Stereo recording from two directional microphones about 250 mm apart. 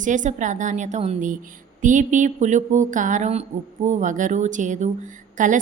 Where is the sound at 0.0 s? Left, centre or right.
Right.